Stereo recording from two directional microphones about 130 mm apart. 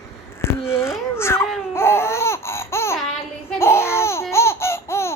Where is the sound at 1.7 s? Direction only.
20° left (ahead or behind).